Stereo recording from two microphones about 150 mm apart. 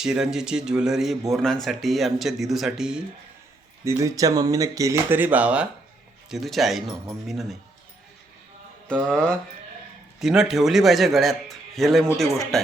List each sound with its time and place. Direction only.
0.0 s a man's voice: 5° right (ahead or behind)
3.8 s a man's voice: 20° right (ahead or behind); by 7.5 s centre (ahead or behind)
8.9 s a man's voice: 5° left (ahead or behind)